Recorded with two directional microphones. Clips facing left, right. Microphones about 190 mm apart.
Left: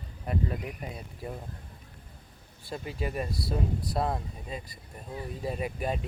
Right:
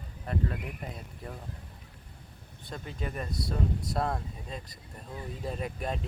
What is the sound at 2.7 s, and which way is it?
Speech, 5° left (ahead or behind).